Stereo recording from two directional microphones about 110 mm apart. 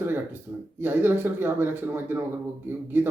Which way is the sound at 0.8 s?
20° right (ahead or behind).